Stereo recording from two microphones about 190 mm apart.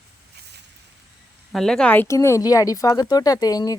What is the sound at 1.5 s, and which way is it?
Speech, centre (ahead or behind).